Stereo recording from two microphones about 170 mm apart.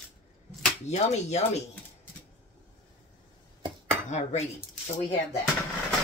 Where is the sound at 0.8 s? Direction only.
40° left (ahead or behind).